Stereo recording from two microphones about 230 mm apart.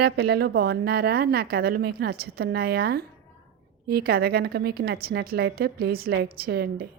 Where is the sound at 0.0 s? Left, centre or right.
Right.